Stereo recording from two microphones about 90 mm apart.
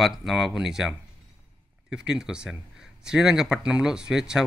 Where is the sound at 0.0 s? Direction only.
5° right (ahead or behind).